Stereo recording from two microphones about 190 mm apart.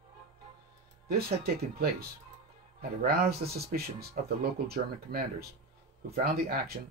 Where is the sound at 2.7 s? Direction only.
55° right (ahead or behind).